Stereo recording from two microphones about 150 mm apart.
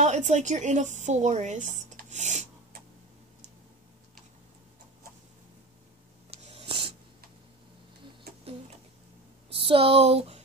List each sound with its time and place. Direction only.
0.0 s a woman's voice: 50° right (ahead or behind)
6.3 s a sound: 40° right (ahead or behind)
9.5 s speech: 40° right (ahead or behind)